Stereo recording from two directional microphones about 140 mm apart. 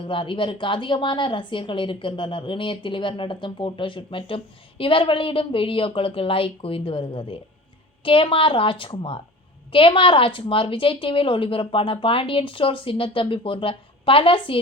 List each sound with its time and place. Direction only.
0.0 s a woman's voice: 40° left (ahead or behind)